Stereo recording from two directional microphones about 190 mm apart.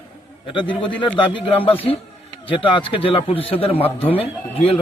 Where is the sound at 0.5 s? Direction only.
25° left (ahead or behind).